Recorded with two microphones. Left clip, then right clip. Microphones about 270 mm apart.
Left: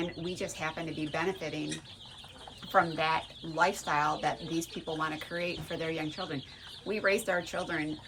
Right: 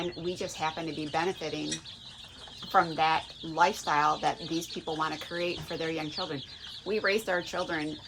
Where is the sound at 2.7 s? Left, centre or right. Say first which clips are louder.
Right 2 dB; right.